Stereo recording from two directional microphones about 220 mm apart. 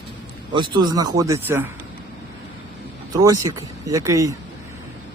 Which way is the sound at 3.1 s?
15° right (ahead or behind).